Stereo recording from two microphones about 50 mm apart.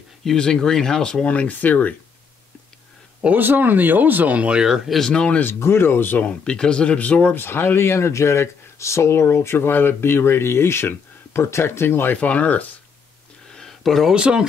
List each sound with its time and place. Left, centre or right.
0.4 s speech: centre
1.2 s speech: left
3.3 s speech: right
4.4 s speech: centre
4.9 s speech: centre
5.4 s speech: left
6.2 s speech: left
7.3 s speech: left
12.2 s speech: left
13.5 s a sound: centre
14.1 s speech: centre